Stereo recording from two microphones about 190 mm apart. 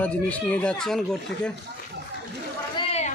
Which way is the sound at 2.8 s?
35° left (ahead or behind).